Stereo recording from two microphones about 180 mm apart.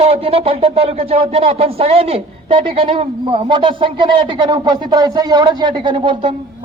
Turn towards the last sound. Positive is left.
turn(degrees=-25)  # may be behind; listen again after turning